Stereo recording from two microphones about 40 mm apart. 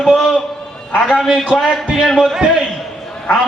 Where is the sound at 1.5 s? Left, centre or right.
Centre.